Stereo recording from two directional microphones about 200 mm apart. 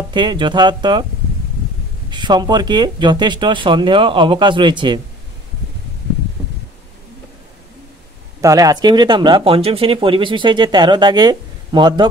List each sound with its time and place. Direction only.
0.1 s speech: 25° right (ahead or behind)
2.0 s speech: 20° right (ahead or behind)
8.4 s speech: 15° right (ahead or behind)